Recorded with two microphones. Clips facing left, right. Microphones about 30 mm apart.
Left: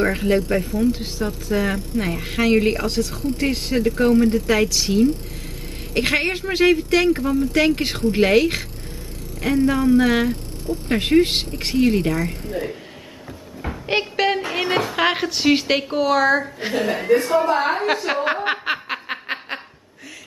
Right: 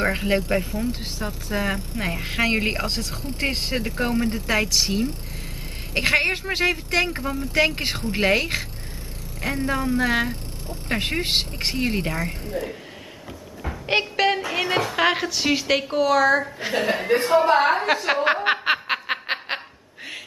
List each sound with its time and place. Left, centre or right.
0.0 s a woman's voice: centre
0.7 s a woman's voice: centre
3.8 s a woman's voice: centre
5.9 s a woman's voice: centre
13.7 s a sound: centre
14.5 s a woman's voice: centre
16.7 s a woman's voice: centre
17.6 s speech: centre
18.2 s snicker: centre